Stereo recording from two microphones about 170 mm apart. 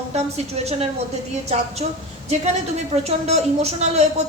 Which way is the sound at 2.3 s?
40° right (ahead or behind).